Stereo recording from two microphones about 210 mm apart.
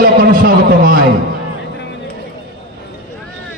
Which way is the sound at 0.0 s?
45° right (ahead or behind).